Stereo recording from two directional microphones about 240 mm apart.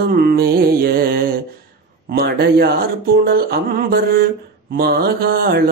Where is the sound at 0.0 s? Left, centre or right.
Right.